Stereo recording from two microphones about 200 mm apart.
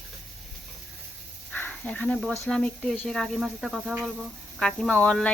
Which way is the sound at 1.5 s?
5° left (ahead or behind).